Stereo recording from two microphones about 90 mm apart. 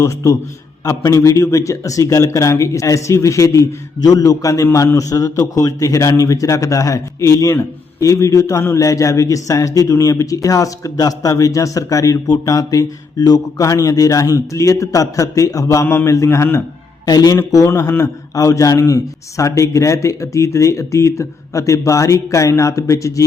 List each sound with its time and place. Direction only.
0.0 s a man's voice: 35° left (ahead or behind)
17.1 s speech: 45° left (ahead or behind)
17.5 s a man's voice: 35° left (ahead or behind)